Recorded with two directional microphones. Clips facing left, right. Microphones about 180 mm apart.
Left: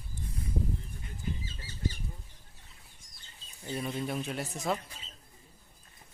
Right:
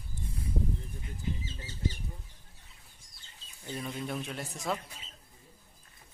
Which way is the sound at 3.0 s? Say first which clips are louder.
Left 1 dB; 30° right (ahead or behind).